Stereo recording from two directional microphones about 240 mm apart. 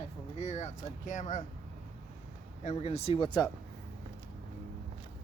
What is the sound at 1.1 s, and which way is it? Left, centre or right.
Speech, left.